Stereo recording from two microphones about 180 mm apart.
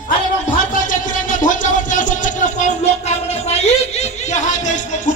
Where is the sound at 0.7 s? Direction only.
45° left (ahead or behind).